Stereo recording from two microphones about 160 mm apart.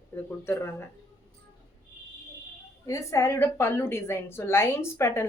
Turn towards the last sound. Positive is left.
turn(degrees=15)  # may be behind; listen again after turning